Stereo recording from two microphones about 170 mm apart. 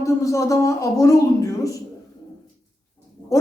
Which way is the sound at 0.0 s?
20° left (ahead or behind).